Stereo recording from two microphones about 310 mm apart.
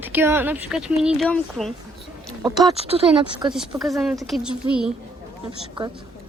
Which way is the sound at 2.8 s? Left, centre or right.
Centre.